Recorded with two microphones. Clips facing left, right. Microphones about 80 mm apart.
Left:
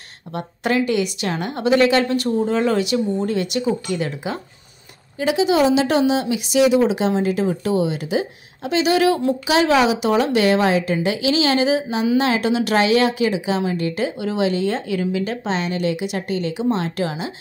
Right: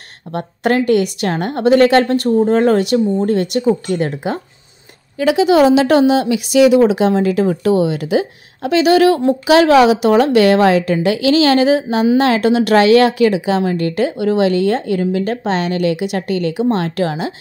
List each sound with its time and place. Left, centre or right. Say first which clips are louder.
0.3 s a woman's voice: right 5 dB; right
5.2 s a woman's voice: right 6 dB; right